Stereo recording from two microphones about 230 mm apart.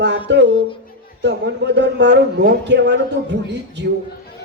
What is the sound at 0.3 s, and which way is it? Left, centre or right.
Speech, right.